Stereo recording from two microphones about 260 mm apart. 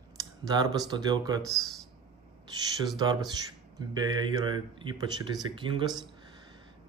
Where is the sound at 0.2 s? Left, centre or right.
Centre.